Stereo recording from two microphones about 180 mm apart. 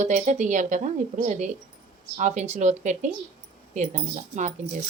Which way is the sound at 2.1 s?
40° right (ahead or behind).